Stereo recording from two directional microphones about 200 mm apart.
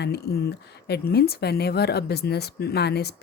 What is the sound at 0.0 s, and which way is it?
Speech, 55° left (ahead or behind).